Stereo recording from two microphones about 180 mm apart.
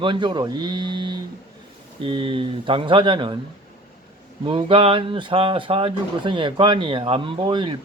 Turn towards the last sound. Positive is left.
turn(degrees=-25)  # may be behind; listen again after turning